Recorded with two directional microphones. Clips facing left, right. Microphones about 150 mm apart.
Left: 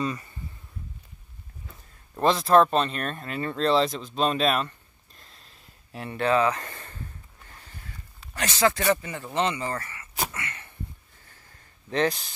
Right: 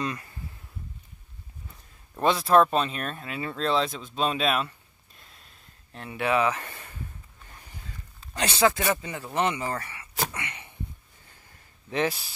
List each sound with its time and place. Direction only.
0.0 s speech: centre (ahead or behind)
2.1 s speech: centre (ahead or behind)
8.4 s speech: 15° right (ahead or behind)
10.3 s a sound: 15° right (ahead or behind)
11.9 s speech: 5° right (ahead or behind)